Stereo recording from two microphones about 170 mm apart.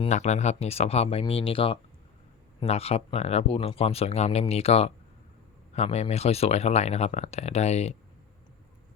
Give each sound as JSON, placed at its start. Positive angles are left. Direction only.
{"t": 0.0, "sound": "speech", "side_deg": 40}